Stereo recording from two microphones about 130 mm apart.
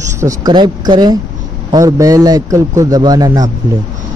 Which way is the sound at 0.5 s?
35° right (ahead or behind).